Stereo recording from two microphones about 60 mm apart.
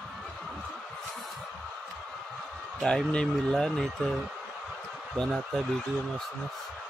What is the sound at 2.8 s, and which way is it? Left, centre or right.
Speech, centre.